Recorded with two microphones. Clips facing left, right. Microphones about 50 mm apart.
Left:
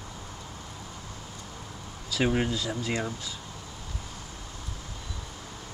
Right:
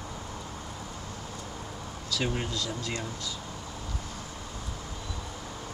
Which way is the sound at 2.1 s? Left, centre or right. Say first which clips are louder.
Left 5 dB; centre.